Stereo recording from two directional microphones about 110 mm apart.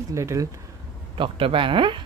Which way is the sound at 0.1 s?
25° right (ahead or behind).